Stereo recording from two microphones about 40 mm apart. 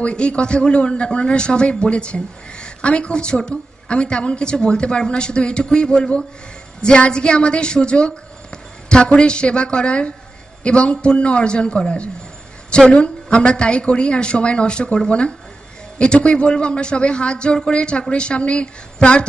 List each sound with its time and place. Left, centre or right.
0.0 s a man's voice: left